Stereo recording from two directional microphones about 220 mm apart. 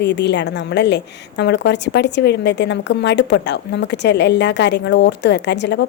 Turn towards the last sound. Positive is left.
turn(degrees=50)  # may be behind; listen again after turning